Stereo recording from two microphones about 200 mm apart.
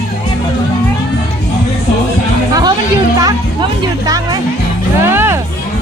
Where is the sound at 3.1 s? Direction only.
20° right (ahead or behind).